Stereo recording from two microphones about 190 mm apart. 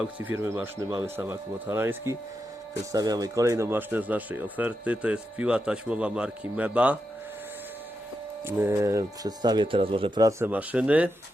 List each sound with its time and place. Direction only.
0.2 s speech: 10° right (ahead or behind)
8.4 s speech: 10° right (ahead or behind)